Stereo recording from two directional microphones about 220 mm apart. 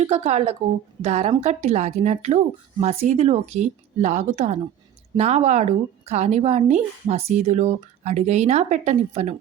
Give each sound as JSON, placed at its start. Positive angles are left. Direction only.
{"t": 0.0, "sound": "speech", "side_deg": -30}